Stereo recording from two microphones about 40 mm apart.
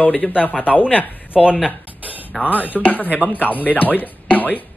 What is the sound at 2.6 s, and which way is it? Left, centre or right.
Speech, left.